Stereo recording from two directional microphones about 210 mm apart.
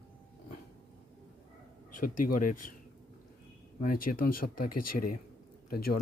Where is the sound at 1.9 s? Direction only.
40° left (ahead or behind).